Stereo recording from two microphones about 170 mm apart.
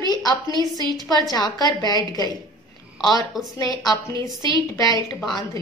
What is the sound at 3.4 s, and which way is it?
A woman's voice, 20° left (ahead or behind).